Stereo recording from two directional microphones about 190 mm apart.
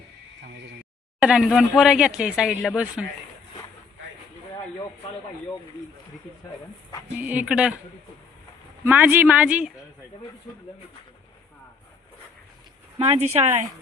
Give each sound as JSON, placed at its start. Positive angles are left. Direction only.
{"t": 1.2, "sound": "speech", "side_deg": -5}
{"t": 7.2, "sound": "speech", "side_deg": -10}
{"t": 8.8, "sound": "speech", "side_deg": -10}
{"t": 13.0, "sound": "speech", "side_deg": -30}